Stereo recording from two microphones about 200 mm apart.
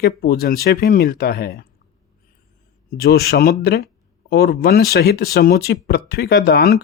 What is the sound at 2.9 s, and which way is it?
Speech, 50° left (ahead or behind).